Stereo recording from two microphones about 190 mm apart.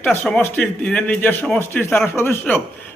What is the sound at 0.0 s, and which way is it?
A man's voice, 5° left (ahead or behind).